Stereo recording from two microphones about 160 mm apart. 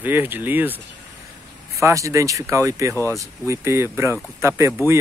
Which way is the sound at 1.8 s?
20° right (ahead or behind).